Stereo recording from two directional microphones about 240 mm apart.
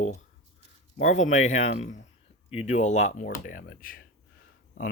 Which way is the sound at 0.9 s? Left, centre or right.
Left.